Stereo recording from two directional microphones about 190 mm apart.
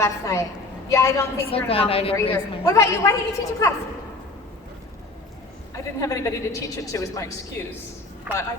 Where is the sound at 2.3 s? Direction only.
15° left (ahead or behind).